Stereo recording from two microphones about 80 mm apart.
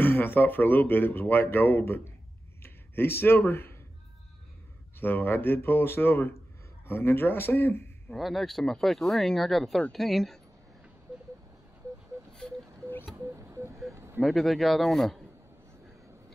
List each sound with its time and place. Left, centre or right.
0.0 s speech: left
5.0 s speech: left
8.1 s speech: centre
12.3 s a sound: centre
13.1 s a sound: right
14.2 s speech: centre